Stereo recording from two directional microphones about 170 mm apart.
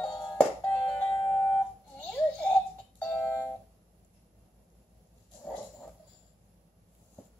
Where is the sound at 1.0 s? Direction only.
5° left (ahead or behind).